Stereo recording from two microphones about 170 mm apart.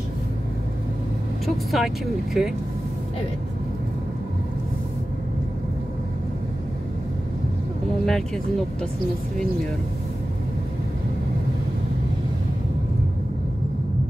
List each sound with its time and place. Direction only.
1.4 s speech: centre (ahead or behind)
8.0 s speech: 5° left (ahead or behind)